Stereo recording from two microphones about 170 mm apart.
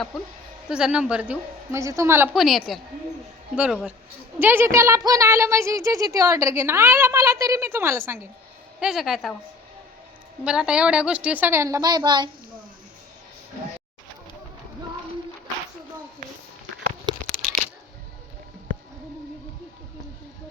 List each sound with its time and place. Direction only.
0.7 s a woman's voice: 5° right (ahead or behind)
2.3 s a woman's voice: centre (ahead or behind)
8.8 s a woman's voice: centre (ahead or behind)
10.4 s a woman's voice: 5° right (ahead or behind); by 12.3 s 25° right (ahead or behind)